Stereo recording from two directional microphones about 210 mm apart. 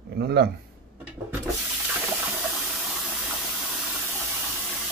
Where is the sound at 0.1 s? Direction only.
50° right (ahead or behind).